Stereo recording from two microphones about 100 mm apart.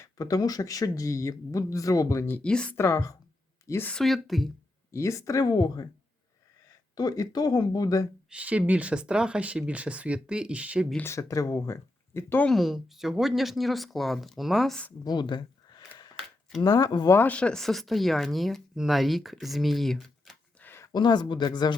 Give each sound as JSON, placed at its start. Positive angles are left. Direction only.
{"t": 0.0, "sound": "speech", "side_deg": 35}
{"t": 2.3, "sound": "speech", "side_deg": 10}
{"t": 2.7, "sound": "speech", "side_deg": 30}
{"t": 4.0, "sound": "speech", "side_deg": 0}
{"t": 4.9, "sound": "speech", "side_deg": 30}
{"t": 6.9, "sound": "speech", "side_deg": 40}
{"t": 8.3, "sound": "speech", "side_deg": -15}
{"t": 11.0, "sound": "speech", "side_deg": 30}
{"t": 12.5, "sound": "speech", "side_deg": 0}
{"t": 15.0, "sound": "speech", "side_deg": 50}
{"t": 16.6, "sound": "speech", "side_deg": 40}
{"t": 17.2, "sound": "speech", "side_deg": 15}
{"t": 20.6, "sound": "a sound", "side_deg": 25}
{"t": 20.9, "sound": "speech", "side_deg": 45}